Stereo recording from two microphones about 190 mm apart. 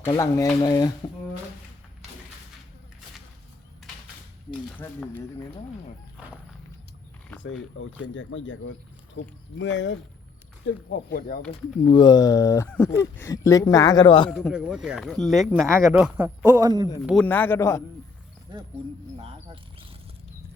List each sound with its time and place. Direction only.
0.0 s speech: 15° left (ahead or behind)
4.8 s speech: 10° left (ahead or behind)
7.4 s speech: 80° left
9.2 s speech: 65° left (ahead or behind)
10.8 s speech: 55° left (ahead or behind)
11.9 s speech: 20° left (ahead or behind)
12.6 s speech: 5° left (ahead or behind); by 14.3 s 25° left (ahead or behind)
14.3 s a man's voice: centre (ahead or behind)
16.6 s speech: 20° right (ahead or behind)
17.0 s speech: centre (ahead or behind)
19.1 s a sound: 30° right (ahead or behind)